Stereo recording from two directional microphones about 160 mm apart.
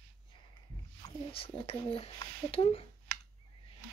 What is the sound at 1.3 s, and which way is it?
Speech, 35° left (ahead or behind).